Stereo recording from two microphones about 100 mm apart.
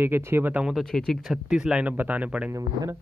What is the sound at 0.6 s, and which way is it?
Speech, centre (ahead or behind).